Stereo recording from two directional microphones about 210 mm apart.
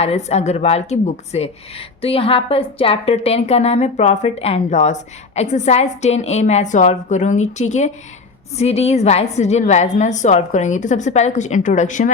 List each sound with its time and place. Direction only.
0.0 s a woman's voice: 30° left (ahead or behind)